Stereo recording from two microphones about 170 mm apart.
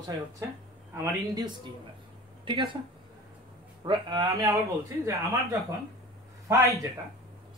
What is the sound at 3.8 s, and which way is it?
Speech, 30° right (ahead or behind).